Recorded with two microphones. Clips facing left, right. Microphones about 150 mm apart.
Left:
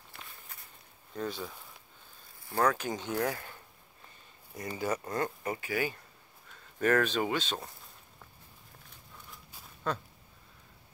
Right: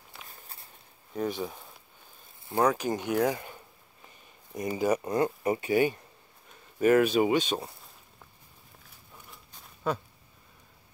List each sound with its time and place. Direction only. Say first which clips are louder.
0.3 s walk: right 2 dB; 30° right (ahead or behind)
1.1 s speech: right 5 dB; 15° right (ahead or behind)
4.6 s speech: right 7 dB; 15° right (ahead or behind)
6.8 s speech: right 6 dB; 10° right (ahead or behind)
9.3 s a sound: even; 5° left (ahead or behind)